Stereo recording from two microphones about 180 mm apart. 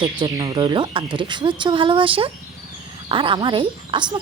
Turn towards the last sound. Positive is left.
turn(degrees=-25)  # may be behind; listen again after turning